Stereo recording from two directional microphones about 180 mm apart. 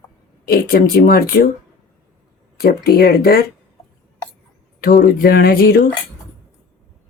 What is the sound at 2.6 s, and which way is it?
Speech, 60° left (ahead or behind).